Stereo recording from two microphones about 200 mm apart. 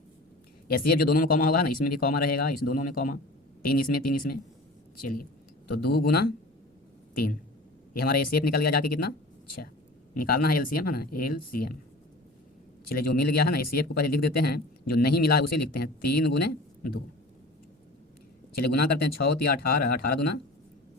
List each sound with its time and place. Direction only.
0.7 s speech: 50° left (ahead or behind)
12.9 s speech: 50° left (ahead or behind)
18.5 s speech: 50° left (ahead or behind)